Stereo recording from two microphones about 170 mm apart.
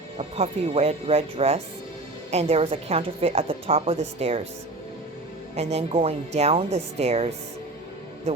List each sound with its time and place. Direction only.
0.2 s a woman's voice: 35° right (ahead or behind)
5.5 s a woman's voice: 40° right (ahead or behind)